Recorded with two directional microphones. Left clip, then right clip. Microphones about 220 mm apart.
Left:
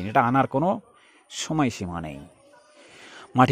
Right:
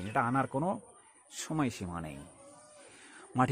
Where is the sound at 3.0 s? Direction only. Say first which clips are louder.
Left 11 dB; 30° left (ahead or behind).